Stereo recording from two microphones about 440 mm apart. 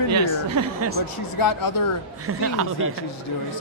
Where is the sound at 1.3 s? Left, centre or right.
Left.